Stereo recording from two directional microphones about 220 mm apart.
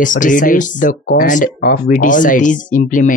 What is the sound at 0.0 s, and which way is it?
Speech, 35° left (ahead or behind).